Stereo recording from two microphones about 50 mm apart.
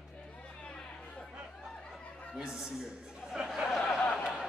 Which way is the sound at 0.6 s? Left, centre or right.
Left.